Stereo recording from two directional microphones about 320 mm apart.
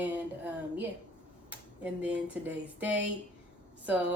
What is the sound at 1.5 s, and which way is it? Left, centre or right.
Speech, centre.